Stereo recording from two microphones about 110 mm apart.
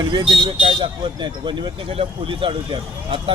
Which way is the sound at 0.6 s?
55° right (ahead or behind).